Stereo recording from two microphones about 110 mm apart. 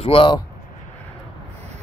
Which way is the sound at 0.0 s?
55° left (ahead or behind).